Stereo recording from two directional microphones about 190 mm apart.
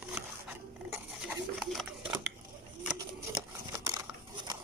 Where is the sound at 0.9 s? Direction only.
5° right (ahead or behind).